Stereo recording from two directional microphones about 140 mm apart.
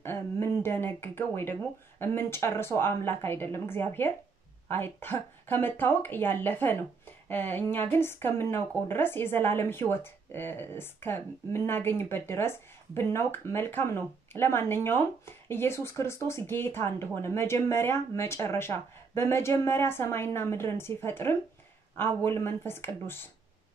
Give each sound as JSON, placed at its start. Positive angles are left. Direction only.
{"t": 0.0, "sound": "a woman's voice", "side_deg": 15}